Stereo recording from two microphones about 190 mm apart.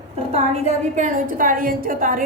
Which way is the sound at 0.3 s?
35° right (ahead or behind).